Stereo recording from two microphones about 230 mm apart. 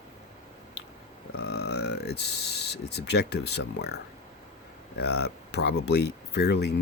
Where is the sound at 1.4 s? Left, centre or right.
Left.